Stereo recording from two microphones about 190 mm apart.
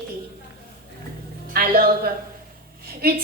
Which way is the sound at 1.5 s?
50° right (ahead or behind).